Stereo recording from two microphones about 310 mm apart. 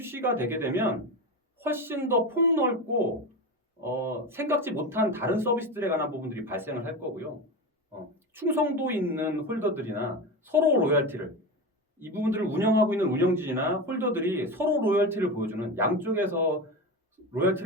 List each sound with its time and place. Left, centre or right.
0.0 s a man's voice: centre
8.3 s a man's voice: centre